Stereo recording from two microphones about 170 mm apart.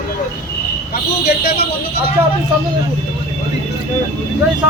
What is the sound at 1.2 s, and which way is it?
Speech, 65° left (ahead or behind).